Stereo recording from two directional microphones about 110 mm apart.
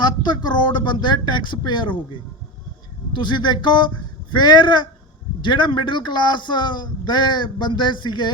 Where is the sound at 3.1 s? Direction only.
45° left (ahead or behind).